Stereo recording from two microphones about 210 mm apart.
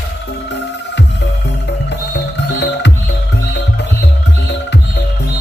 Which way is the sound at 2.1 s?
55° left (ahead or behind).